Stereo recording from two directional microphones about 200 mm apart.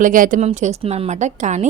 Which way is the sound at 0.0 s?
40° right (ahead or behind).